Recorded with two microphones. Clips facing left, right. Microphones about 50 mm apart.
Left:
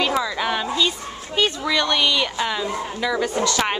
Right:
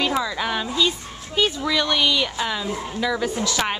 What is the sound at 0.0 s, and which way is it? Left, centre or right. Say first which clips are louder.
Speech: left 1 dB; centre.